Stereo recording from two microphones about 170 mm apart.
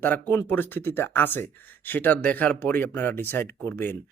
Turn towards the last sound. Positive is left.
turn(degrees=10)  # may be behind; listen again after turning